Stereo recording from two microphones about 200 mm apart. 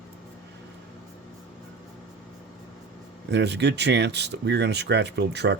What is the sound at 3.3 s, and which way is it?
Speech, 60° right (ahead or behind).